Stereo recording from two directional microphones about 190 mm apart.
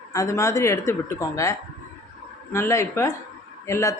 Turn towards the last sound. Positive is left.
turn(degrees=15)  # may be behind; listen again after turning